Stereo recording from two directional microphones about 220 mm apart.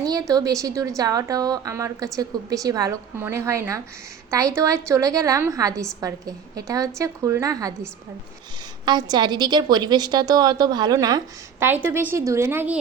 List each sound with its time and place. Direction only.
0.0 s a woman's voice: 15° right (ahead or behind)
8.8 s a woman's voice: 20° right (ahead or behind)